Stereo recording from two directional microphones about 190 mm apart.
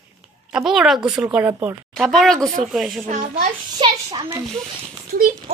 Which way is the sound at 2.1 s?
Centre (ahead or behind).